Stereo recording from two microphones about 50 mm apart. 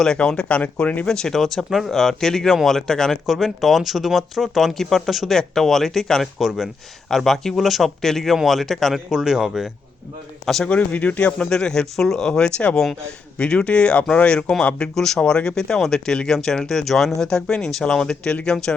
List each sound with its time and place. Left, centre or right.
0.2 s speech: centre
1.0 s speech: centre
1.4 s speech: centre
3.2 s speech: centre
6.4 s speech: centre
9.0 s speech: centre
10.4 s speech: centre
10.7 s speech: left
14.9 s speech: centre